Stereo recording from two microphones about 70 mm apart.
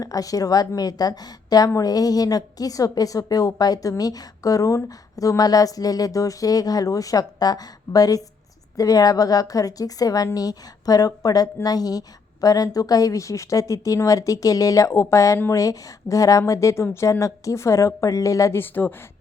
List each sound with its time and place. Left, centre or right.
0.0 s a woman's voice: left
18.5 s speech: left